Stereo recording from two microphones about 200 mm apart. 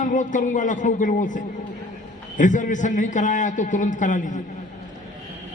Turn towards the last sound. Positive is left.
turn(degrees=40)  # may be behind; listen again after turning